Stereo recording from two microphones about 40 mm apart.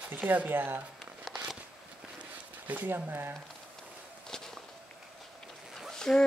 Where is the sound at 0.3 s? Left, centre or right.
Right.